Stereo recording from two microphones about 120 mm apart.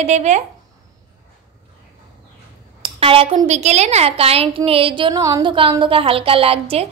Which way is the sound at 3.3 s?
70° right (ahead or behind).